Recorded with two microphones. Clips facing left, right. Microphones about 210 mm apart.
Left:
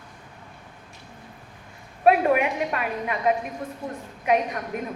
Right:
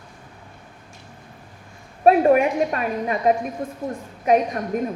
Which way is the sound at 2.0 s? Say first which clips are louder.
Right 4 dB; 35° right (ahead or behind).